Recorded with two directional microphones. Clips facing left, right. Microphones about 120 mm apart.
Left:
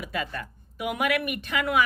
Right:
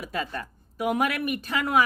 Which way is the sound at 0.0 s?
35° right (ahead or behind).